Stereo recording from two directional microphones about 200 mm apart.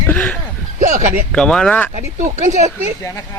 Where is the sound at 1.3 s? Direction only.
5° left (ahead or behind).